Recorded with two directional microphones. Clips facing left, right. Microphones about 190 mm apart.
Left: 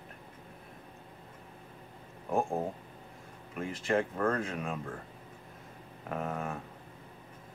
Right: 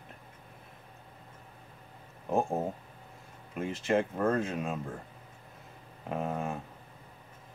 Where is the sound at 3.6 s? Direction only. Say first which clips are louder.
Right 2 dB; 25° right (ahead or behind).